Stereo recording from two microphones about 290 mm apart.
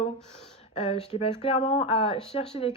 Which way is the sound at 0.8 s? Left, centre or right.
Centre.